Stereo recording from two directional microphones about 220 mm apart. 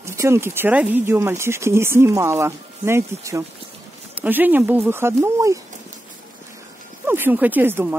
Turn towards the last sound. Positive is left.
turn(degrees=-10)  # may be behind; listen again after turning